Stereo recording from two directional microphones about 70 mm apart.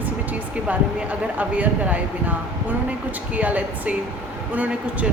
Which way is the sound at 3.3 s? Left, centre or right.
Right.